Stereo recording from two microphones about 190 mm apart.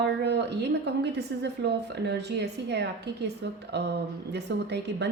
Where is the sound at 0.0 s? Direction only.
65° right (ahead or behind).